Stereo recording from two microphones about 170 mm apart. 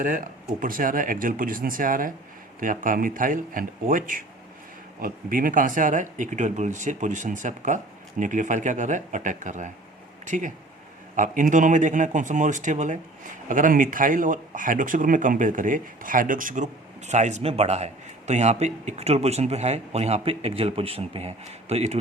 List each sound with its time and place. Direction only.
0.6 s a man's voice: 55° right (ahead or behind); by 21.9 s 40° right (ahead or behind)